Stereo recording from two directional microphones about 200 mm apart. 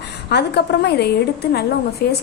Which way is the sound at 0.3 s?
55° left (ahead or behind).